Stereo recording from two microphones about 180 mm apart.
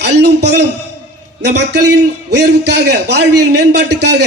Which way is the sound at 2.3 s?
70° right (ahead or behind).